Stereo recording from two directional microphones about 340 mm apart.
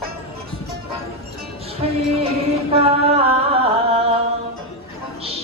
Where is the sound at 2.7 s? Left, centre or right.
Centre.